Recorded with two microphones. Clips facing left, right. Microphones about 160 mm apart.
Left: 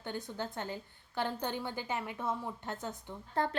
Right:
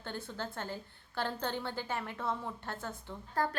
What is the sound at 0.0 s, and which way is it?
A woman's voice, 15° left (ahead or behind).